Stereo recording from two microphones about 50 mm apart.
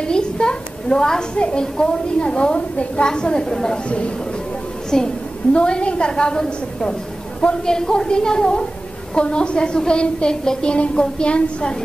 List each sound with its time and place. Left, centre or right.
0.0 s a woman's voice: centre
4.9 s a woman's voice: centre